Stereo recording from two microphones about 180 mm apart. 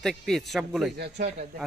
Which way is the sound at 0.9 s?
65° right (ahead or behind).